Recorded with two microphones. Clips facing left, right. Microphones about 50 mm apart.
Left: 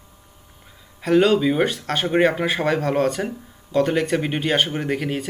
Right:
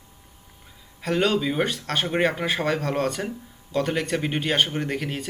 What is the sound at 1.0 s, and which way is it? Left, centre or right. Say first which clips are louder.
Speech: left 6 dB; centre.